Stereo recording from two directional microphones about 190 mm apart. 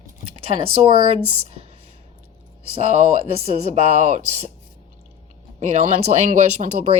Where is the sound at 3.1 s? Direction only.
35° right (ahead or behind).